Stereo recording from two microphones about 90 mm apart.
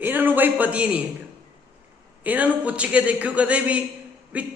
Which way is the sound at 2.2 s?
15° right (ahead or behind).